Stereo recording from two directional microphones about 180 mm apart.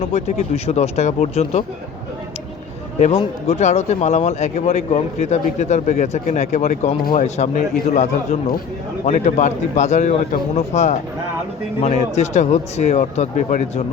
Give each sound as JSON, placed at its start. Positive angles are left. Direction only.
{"t": 0.1, "sound": "speech", "side_deg": 35}
{"t": 3.2, "sound": "speech", "side_deg": 35}